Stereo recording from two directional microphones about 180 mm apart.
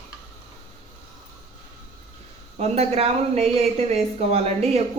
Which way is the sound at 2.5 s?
35° right (ahead or behind).